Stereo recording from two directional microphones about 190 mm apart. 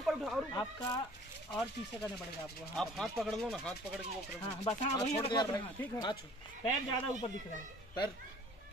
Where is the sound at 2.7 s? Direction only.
Centre (ahead or behind).